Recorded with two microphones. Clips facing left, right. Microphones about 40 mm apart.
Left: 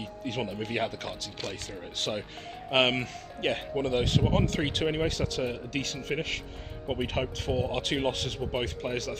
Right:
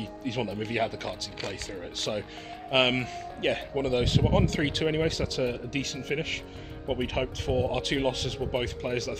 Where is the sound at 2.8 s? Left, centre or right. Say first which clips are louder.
Right 1 dB; right.